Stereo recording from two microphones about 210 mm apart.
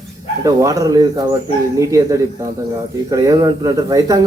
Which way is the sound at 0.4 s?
15° right (ahead or behind).